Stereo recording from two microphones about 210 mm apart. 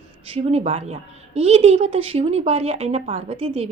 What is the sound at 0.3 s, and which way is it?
A woman's voice, 30° right (ahead or behind).